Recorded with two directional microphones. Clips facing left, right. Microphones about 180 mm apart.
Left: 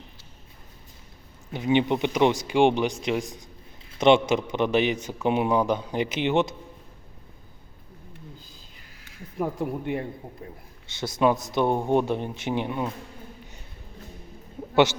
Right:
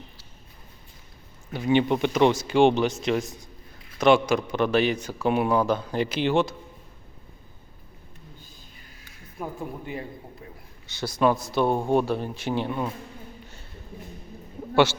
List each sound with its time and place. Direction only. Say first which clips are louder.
1.5 s a man's voice: right 1 dB; 20° left (ahead or behind)
9.4 s speech: left 6 dB; 70° left (ahead or behind)
10.8 s a man's voice: even; 25° left (ahead or behind)